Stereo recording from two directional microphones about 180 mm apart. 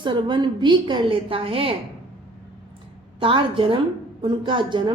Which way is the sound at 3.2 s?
30° right (ahead or behind).